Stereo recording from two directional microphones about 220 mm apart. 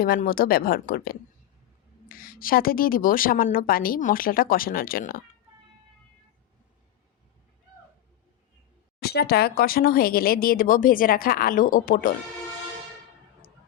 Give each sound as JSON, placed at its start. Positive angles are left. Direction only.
{"t": 0.0, "sound": "a woman's voice", "side_deg": 40}
{"t": 9.0, "sound": "speech", "side_deg": 45}